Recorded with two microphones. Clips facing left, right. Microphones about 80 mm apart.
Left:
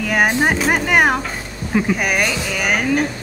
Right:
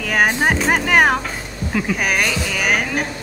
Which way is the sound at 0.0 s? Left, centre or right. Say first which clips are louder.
Left 1 dB; centre.